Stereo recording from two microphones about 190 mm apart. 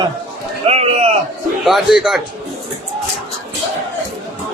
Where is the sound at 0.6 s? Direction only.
30° right (ahead or behind).